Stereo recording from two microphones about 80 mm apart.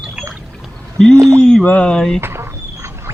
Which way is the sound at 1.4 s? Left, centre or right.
Centre.